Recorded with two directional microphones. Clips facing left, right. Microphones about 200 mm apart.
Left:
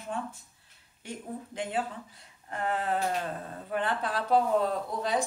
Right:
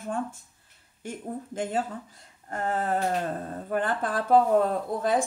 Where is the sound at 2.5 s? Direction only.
45° right (ahead or behind).